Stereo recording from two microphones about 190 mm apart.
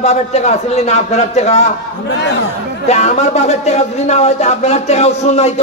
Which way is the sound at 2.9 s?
35° left (ahead or behind).